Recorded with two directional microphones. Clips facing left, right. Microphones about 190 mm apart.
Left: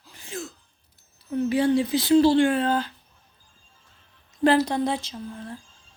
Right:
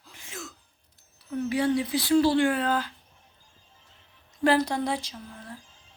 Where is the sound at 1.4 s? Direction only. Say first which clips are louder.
Left 4 dB; 25° left (ahead or behind).